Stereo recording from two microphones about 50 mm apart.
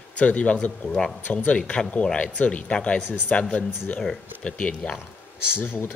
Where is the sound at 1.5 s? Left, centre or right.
Left.